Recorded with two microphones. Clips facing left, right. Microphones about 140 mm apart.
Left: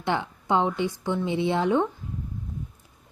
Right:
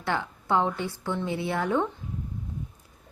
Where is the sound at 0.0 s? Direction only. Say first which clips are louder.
Left 2 dB; 20° left (ahead or behind).